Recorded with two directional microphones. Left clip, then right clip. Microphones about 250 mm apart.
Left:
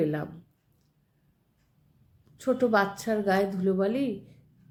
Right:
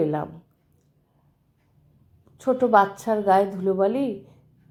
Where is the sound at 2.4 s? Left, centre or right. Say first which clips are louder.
Right 6 dB; centre.